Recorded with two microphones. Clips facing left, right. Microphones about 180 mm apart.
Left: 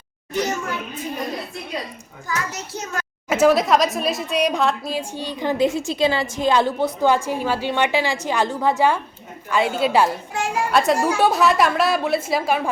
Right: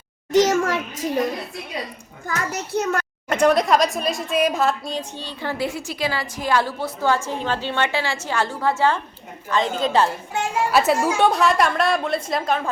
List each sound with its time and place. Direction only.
0.3 s a child's voice: 90° right
2.7 s a child's voice: 60° right (ahead or behind)
3.2 s a woman's voice: 5° left (ahead or behind)
10.7 s a woman's voice: 5° right (ahead or behind)